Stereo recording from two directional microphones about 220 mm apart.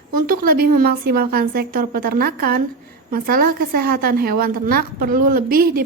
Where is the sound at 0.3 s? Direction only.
40° right (ahead or behind).